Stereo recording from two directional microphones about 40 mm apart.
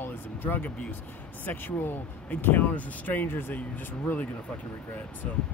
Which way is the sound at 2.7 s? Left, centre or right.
Left.